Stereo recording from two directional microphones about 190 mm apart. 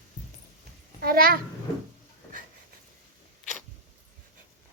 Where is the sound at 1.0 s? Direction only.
50° right (ahead or behind).